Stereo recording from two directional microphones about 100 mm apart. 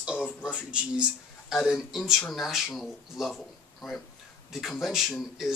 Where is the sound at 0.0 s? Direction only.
10° right (ahead or behind).